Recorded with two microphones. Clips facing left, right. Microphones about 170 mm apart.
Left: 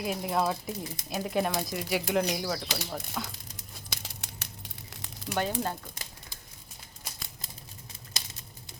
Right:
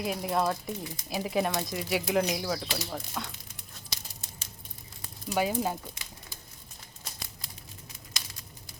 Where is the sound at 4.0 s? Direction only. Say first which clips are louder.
Left 4 dB; 70° left (ahead or behind).